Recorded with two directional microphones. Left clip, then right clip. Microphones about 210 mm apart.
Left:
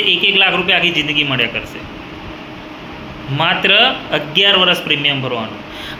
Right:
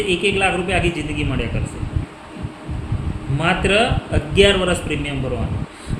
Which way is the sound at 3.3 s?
10° right (ahead or behind).